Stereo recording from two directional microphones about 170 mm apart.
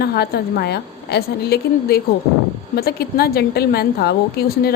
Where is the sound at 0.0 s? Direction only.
65° left (ahead or behind).